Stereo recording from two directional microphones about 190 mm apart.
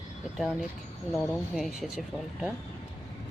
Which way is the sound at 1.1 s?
Centre (ahead or behind).